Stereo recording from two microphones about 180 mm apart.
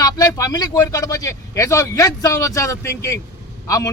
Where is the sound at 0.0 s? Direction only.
20° left (ahead or behind).